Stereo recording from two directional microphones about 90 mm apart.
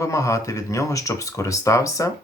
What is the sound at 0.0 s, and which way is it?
Speech, 35° left (ahead or behind).